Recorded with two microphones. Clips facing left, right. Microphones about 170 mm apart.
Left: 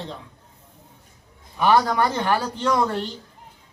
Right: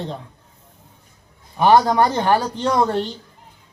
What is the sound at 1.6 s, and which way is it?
A man's voice, 30° right (ahead or behind).